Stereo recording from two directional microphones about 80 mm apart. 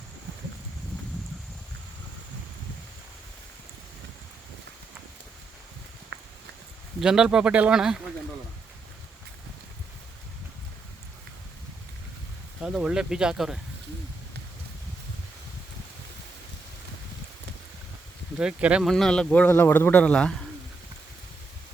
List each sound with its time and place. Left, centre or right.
7.0 s speech: centre
12.6 s speech: centre
18.3 s speech: centre
18.8 s speech: centre
19.3 s a man's voice: left